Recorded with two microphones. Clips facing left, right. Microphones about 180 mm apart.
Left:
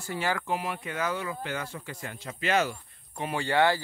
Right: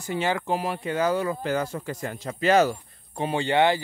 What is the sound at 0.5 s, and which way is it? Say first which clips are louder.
A man's voice: right 5 dB; 35° right (ahead or behind).